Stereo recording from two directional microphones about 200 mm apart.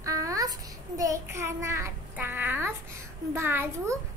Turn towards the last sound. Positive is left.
turn(degrees=-10)  # may be behind; listen again after turning